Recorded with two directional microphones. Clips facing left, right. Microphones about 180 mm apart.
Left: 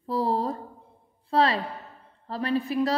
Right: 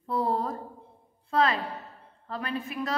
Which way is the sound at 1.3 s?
35° left (ahead or behind).